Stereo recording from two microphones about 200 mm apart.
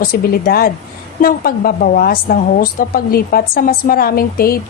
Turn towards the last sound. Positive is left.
turn(degrees=50)  # may be behind; listen again after turning